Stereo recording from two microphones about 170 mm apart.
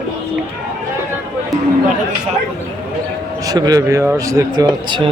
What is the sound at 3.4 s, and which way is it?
Speech, 25° right (ahead or behind).